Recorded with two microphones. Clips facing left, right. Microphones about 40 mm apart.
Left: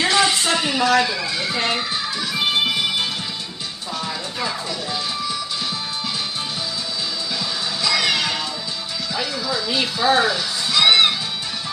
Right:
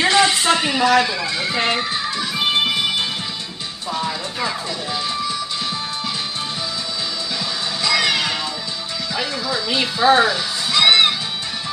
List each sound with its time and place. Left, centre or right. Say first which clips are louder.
0.0 s a sound: right 2 dB; centre
1.0 s speech: right 1 dB; centre
1.6 s music: right 3 dB; centre
7.8 s music: right 2 dB; centre
9.7 s speech: right 4 dB; centre
10.2 s music: right 1 dB; centre